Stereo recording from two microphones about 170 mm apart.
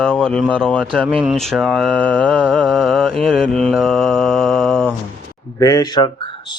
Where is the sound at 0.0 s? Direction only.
5° left (ahead or behind).